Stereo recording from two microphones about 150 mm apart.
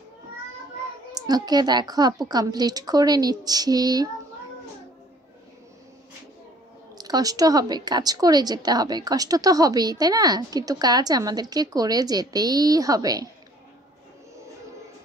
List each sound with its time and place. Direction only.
1.1 s a woman's voice: 25° right (ahead or behind)
7.0 s a woman's voice: 25° right (ahead or behind)